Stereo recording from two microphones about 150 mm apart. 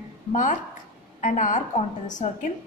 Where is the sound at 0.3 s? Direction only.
55° left (ahead or behind).